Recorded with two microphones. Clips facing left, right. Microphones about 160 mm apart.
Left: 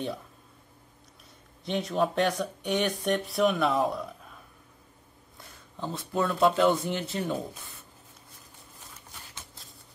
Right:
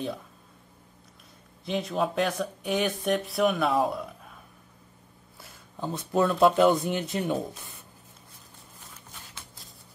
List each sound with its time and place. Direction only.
1.6 s speech: centre (ahead or behind)
5.9 s speech: 20° right (ahead or behind)